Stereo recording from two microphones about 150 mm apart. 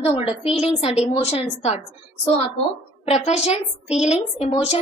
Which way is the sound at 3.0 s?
45° left (ahead or behind).